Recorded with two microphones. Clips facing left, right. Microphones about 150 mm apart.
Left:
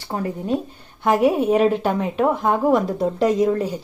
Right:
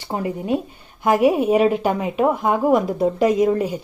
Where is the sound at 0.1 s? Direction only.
15° right (ahead or behind).